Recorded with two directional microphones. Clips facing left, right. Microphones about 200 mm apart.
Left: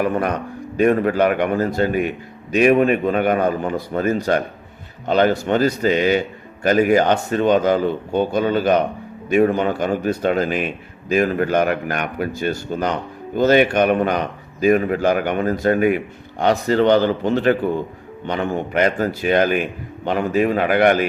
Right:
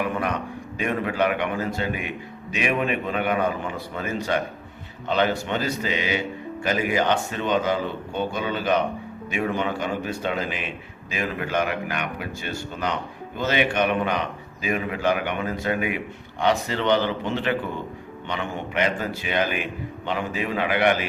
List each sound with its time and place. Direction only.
0.0 s speech: 45° left (ahead or behind)